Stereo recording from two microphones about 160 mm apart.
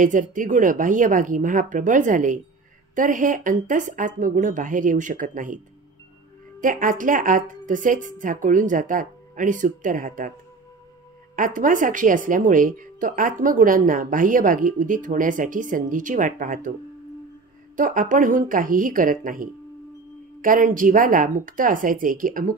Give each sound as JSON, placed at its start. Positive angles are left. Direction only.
{"t": 0.0, "sound": "speech", "side_deg": -55}
{"t": 6.6, "sound": "speech", "side_deg": -55}
{"t": 11.3, "sound": "speech", "side_deg": -55}
{"t": 17.7, "sound": "speech", "side_deg": -55}